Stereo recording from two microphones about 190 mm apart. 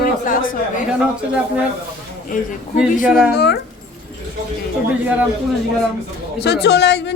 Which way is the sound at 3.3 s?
60° left (ahead or behind).